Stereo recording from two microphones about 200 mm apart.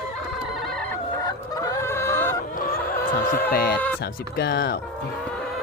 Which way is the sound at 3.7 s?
10° left (ahead or behind).